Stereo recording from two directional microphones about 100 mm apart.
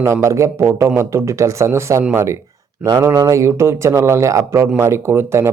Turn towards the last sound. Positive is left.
turn(degrees=-25)  # may be behind; listen again after turning